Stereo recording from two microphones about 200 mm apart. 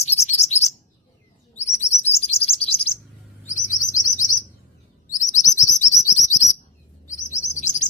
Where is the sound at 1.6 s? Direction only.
30° left (ahead or behind).